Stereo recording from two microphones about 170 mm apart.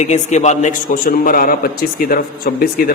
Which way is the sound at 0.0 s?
45° left (ahead or behind).